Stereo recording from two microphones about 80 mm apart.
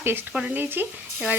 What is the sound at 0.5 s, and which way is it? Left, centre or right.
Speech, right.